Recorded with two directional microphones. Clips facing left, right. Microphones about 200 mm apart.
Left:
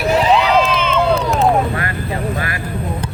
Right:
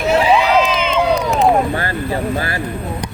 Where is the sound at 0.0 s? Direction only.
5° right (ahead or behind).